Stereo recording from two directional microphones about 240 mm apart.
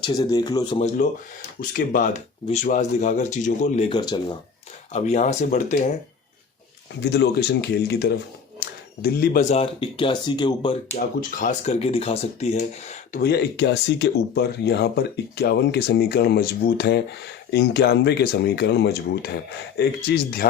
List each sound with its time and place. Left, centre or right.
0.0 s speech: centre
1.7 s speech: left
7.0 s speech: left; by 10.8 s centre
10.9 s speech: left